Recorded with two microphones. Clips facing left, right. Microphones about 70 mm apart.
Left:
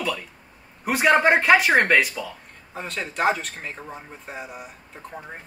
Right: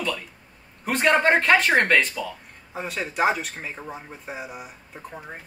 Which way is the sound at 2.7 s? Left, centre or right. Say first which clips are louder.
Right 1 dB; centre.